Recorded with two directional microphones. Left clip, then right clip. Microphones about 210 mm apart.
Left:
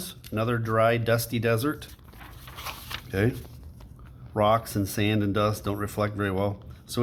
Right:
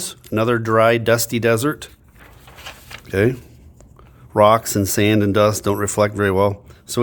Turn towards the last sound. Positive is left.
turn(degrees=-50)  # may be behind; listen again after turning